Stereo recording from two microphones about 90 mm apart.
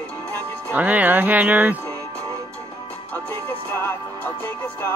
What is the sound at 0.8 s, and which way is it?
Speech, 15° right (ahead or behind).